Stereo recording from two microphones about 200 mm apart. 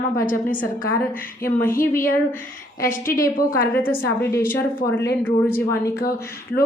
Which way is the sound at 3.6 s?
10° left (ahead or behind).